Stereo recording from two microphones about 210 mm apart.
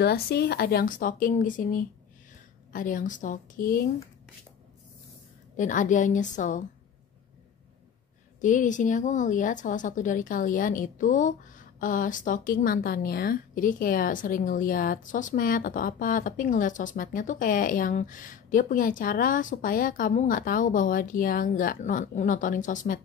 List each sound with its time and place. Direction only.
0.0 s a woman's voice: 50° left (ahead or behind)
5.6 s a woman's voice: 35° left (ahead or behind)
8.4 s a woman's voice: 35° left (ahead or behind)